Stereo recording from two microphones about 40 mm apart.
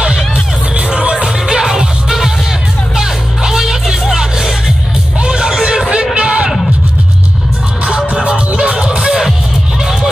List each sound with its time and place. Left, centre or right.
0.7 s music: right
1.1 s music: centre
7.8 s music: right